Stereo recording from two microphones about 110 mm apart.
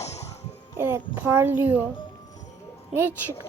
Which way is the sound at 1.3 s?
20° right (ahead or behind).